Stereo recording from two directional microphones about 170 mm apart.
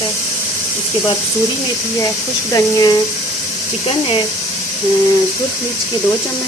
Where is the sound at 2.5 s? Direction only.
20° left (ahead or behind).